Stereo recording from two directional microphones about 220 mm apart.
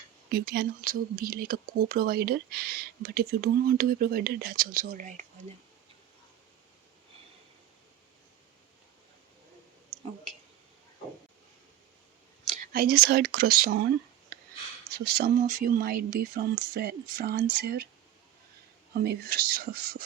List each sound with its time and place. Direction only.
0.3 s speech: 45° right (ahead or behind)
12.5 s speech: 45° right (ahead or behind)
14.8 s speech: 45° right (ahead or behind)
18.9 s speech: 45° right (ahead or behind)